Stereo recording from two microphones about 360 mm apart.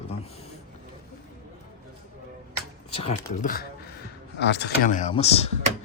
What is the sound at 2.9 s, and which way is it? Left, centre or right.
Speech, centre.